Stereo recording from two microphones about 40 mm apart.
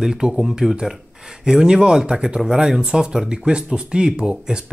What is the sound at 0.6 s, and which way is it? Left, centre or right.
Speech, centre.